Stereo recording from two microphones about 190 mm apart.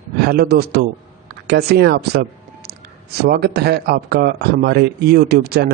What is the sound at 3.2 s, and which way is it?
Speech, 55° right (ahead or behind).